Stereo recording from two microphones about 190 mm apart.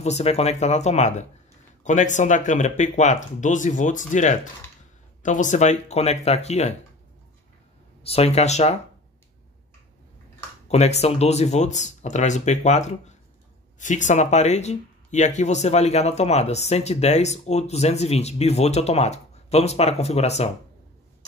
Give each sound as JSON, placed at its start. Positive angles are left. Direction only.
{"t": 0.0, "sound": "speech", "side_deg": 35}
{"t": 8.0, "sound": "speech", "side_deg": 30}
{"t": 10.7, "sound": "speech", "side_deg": 35}